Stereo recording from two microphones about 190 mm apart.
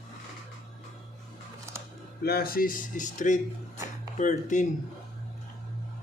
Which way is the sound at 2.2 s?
55° left (ahead or behind).